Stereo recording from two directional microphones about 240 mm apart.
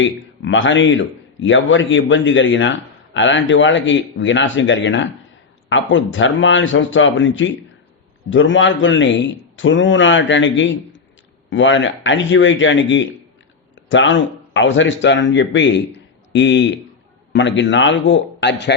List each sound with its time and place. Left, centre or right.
0.0 s a man's voice: left